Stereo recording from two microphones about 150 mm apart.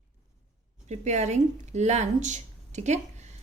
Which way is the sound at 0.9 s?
50° right (ahead or behind).